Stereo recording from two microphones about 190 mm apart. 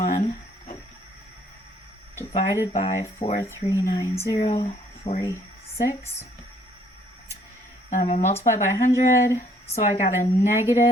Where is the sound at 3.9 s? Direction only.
15° left (ahead or behind).